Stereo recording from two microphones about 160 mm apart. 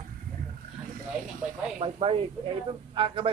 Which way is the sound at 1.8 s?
35° right (ahead or behind).